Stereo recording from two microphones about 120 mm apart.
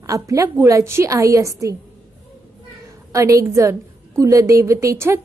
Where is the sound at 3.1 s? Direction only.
25° right (ahead or behind).